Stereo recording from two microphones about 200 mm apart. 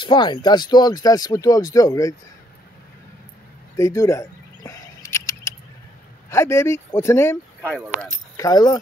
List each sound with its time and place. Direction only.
0.0 s speech: 20° left (ahead or behind)
3.7 s a sound: 15° left (ahead or behind)
6.3 s speech: 15° left (ahead or behind)
8.4 s speech: 20° left (ahead or behind)